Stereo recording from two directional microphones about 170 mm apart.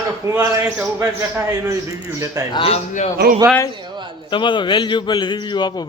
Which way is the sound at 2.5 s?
35° left (ahead or behind).